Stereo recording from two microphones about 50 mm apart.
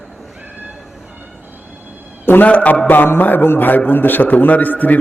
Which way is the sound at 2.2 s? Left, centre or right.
Left.